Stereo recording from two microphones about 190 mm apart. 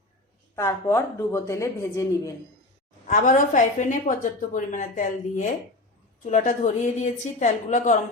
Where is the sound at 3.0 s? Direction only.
40° left (ahead or behind).